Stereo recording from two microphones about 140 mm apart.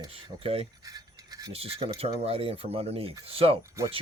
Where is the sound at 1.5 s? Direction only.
45° right (ahead or behind).